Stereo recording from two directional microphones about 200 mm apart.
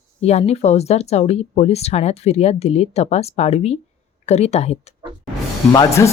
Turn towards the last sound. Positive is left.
turn(degrees=20)  # may be behind; listen again after turning